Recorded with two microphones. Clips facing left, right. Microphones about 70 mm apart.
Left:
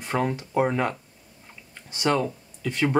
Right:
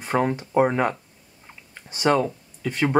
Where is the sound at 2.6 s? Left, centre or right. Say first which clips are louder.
Right 1 dB; centre.